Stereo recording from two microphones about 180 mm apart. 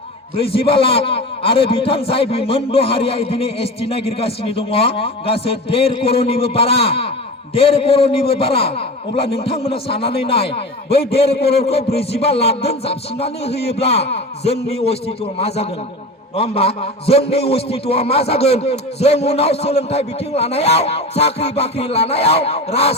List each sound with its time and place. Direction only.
0.5 s a man's voice: 30° left (ahead or behind)
11.3 s a man's voice: 65° left (ahead or behind)
11.6 s a man's voice: 35° left (ahead or behind)